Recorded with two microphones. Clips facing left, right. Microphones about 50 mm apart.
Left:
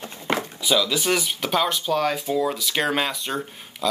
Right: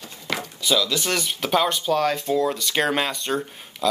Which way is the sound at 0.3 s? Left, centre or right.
Left.